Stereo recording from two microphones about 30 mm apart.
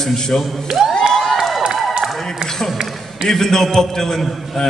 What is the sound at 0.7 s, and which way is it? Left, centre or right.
Music, centre.